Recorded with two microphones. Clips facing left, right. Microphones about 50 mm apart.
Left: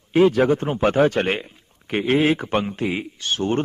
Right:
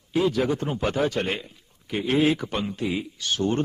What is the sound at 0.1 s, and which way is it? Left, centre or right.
A man's voice, left.